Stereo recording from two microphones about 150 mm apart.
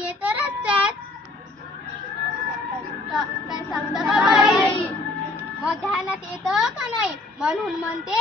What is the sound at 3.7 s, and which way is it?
Speech, 5° right (ahead or behind).